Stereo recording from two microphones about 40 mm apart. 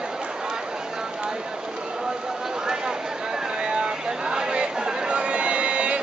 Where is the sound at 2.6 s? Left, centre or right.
Centre.